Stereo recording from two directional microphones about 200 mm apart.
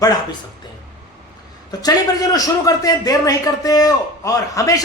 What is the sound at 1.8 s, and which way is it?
A man's voice, 20° left (ahead or behind).